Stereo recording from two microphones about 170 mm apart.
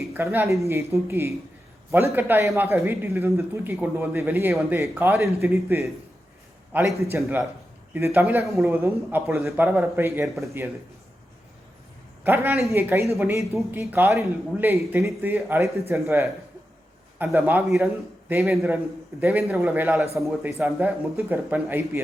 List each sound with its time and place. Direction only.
0.0 s speech: 15° right (ahead or behind)
6.7 s a man's voice: centre (ahead or behind)
7.1 s speech: 15° right (ahead or behind)
12.2 s speech: 10° right (ahead or behind)
17.2 s a man's voice: 10° right (ahead or behind)